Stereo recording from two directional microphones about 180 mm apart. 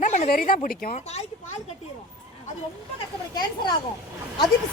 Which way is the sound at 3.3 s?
25° left (ahead or behind).